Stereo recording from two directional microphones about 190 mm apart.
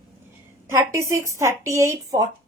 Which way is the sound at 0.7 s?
15° right (ahead or behind).